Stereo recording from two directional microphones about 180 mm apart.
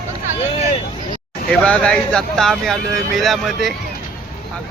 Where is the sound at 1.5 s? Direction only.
5° left (ahead or behind).